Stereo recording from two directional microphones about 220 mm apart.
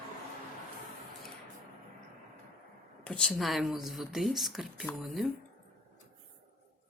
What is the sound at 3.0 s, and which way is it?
Speech, 5° left (ahead or behind).